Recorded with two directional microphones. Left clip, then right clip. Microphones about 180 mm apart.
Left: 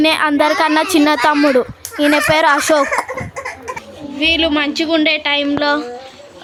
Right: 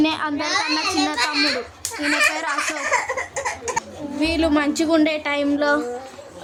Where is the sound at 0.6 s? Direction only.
35° left (ahead or behind).